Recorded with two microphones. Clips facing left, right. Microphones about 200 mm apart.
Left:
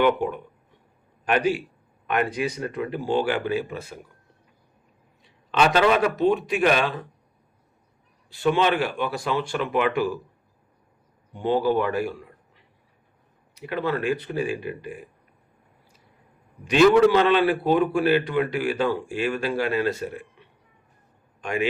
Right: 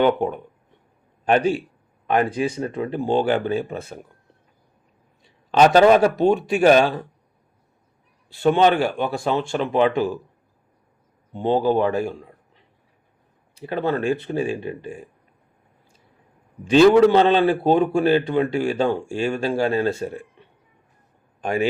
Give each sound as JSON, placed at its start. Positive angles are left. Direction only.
{"t": 0.0, "sound": "a man's voice", "side_deg": -35}
{"t": 5.5, "sound": "a man's voice", "side_deg": -40}
{"t": 8.4, "sound": "speech", "side_deg": -35}
{"t": 11.3, "sound": "speech", "side_deg": -25}
{"t": 13.7, "sound": "speech", "side_deg": -30}
{"t": 16.6, "sound": "speech", "side_deg": -30}
{"t": 21.4, "sound": "a man's voice", "side_deg": -35}